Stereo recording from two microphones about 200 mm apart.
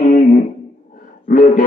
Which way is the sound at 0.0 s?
40° left (ahead or behind).